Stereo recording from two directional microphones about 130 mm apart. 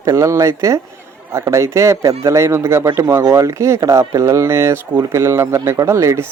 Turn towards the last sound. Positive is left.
turn(degrees=-20)  # may be behind; listen again after turning